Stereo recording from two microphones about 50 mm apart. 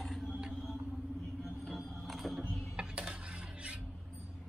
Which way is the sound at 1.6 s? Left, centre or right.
Centre.